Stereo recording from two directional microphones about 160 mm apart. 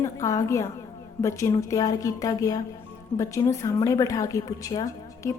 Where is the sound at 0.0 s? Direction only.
20° left (ahead or behind).